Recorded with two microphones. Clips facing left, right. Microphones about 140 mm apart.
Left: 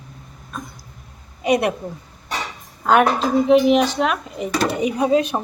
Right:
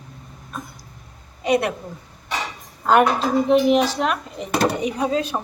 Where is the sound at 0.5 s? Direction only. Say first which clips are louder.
Left 1 dB; 5° right (ahead or behind).